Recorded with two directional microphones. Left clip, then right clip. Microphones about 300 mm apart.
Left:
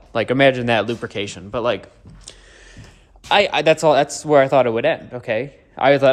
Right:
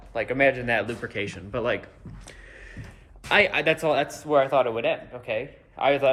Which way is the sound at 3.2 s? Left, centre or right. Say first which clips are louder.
Left 6 dB; centre.